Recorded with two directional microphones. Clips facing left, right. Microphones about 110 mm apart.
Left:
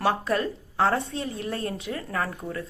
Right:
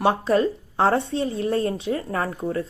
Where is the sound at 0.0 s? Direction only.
25° right (ahead or behind).